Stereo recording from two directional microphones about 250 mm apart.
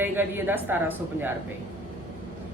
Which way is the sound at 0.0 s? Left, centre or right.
Centre.